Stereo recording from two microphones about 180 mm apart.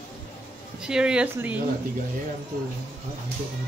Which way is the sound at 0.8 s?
5° right (ahead or behind).